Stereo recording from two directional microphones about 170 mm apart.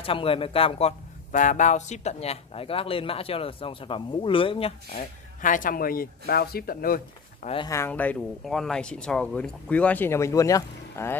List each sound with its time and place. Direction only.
0.0 s speech: 35° left (ahead or behind)
1.3 s speech: 50° left (ahead or behind); by 4.7 s 30° left (ahead or behind)
4.9 s speech: 50° left (ahead or behind)
7.4 s speech: 30° left (ahead or behind)
7.7 s speech: 10° left (ahead or behind)